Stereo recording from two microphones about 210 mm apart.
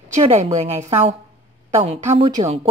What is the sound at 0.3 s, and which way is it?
Speech, 30° right (ahead or behind).